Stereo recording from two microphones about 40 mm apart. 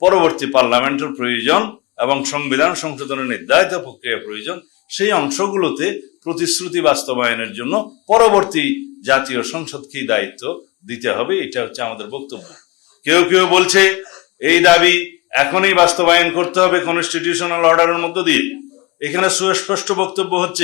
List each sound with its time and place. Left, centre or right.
0.0 s speech: centre